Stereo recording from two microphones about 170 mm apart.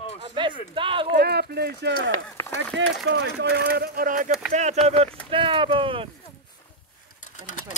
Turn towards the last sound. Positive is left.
turn(degrees=50)  # may be behind; listen again after turning